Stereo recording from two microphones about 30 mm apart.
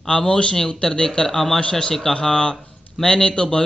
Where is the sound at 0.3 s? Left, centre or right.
Left.